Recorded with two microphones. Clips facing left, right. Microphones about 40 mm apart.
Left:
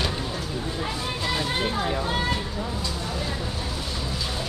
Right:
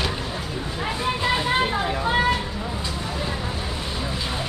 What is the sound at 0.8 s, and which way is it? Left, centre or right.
Music, right.